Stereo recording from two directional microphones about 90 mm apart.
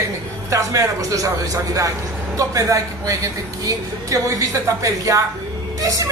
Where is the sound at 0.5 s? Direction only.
40° right (ahead or behind).